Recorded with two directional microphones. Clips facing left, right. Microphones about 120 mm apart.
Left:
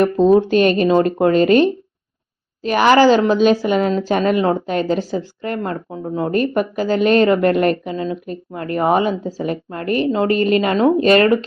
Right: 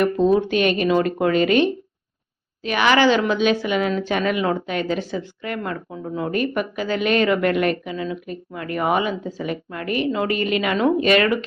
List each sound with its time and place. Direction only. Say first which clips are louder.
0.0 s a woman's voice: left 5 dB; 35° left (ahead or behind)